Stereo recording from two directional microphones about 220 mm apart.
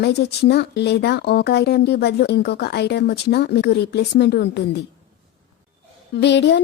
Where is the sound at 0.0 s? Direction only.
50° left (ahead or behind).